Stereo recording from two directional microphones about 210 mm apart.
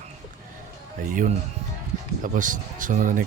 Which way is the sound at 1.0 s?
40° right (ahead or behind).